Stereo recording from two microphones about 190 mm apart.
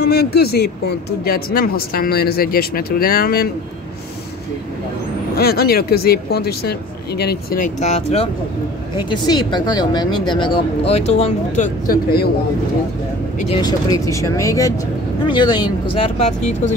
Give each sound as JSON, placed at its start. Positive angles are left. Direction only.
{"t": 0.0, "sound": "speech", "side_deg": 55}
{"t": 5.3, "sound": "speech", "side_deg": 55}
{"t": 8.9, "sound": "speech", "side_deg": 20}
{"t": 13.6, "sound": "speech", "side_deg": 20}